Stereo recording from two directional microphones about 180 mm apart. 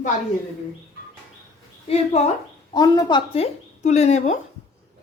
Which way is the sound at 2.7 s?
25° left (ahead or behind).